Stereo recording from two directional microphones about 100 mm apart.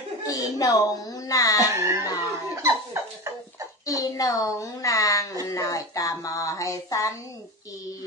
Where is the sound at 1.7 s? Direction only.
30° right (ahead or behind).